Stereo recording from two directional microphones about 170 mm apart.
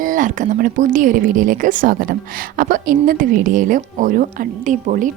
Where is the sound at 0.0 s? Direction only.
50° right (ahead or behind).